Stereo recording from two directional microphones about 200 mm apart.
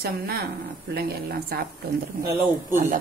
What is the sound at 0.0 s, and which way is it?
Speech, 50° right (ahead or behind).